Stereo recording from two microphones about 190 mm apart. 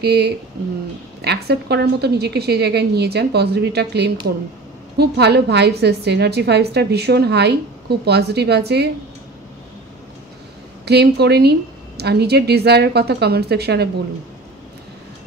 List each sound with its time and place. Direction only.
0.0 s a woman's voice: 60° right (ahead or behind)
10.9 s a woman's voice: 60° right (ahead or behind)